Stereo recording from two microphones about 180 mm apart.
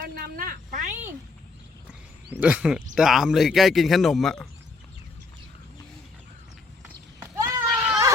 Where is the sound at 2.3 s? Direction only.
5° right (ahead or behind).